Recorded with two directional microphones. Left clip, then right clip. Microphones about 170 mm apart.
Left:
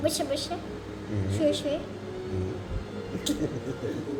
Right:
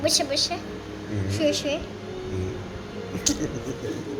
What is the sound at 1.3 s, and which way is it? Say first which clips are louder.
Speech: right 2 dB; 15° left (ahead or behind).